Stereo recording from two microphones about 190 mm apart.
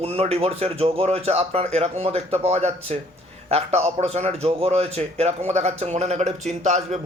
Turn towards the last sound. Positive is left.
turn(degrees=-40)  # may be behind; listen again after turning